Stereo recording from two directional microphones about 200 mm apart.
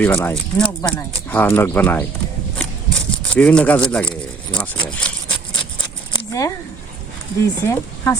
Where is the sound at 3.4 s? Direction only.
5° left (ahead or behind).